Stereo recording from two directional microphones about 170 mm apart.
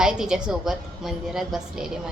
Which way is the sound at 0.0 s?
5° right (ahead or behind).